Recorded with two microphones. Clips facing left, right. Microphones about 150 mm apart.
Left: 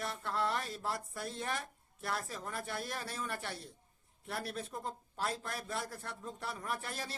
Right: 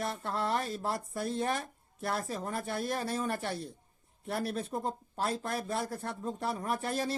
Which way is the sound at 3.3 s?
45° right (ahead or behind).